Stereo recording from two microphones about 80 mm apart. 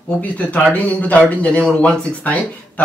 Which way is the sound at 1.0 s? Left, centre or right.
Centre.